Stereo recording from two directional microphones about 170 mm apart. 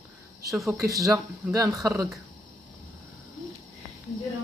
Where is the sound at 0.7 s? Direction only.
20° right (ahead or behind).